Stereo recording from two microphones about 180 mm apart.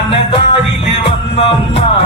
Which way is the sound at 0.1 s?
30° left (ahead or behind).